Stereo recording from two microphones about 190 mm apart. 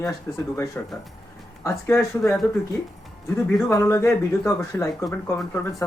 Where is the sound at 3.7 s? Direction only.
15° left (ahead or behind).